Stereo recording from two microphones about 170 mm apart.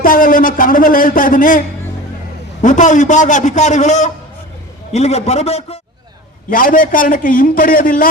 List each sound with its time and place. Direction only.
0.0 s a man's voice: 55° left (ahead or behind); by 5.8 s 35° left (ahead or behind)
6.5 s a man's voice: 55° left (ahead or behind)